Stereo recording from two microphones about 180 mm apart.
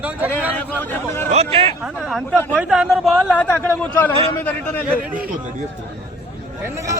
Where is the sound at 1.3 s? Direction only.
35° right (ahead or behind).